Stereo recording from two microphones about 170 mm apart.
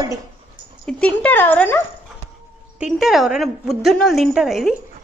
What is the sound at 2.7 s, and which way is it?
A woman's voice, 5° right (ahead or behind).